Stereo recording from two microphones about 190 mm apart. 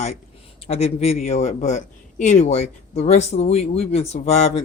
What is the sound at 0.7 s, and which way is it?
Speech, 35° left (ahead or behind).